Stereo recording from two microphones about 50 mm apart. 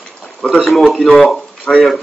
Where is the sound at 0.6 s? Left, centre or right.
Centre.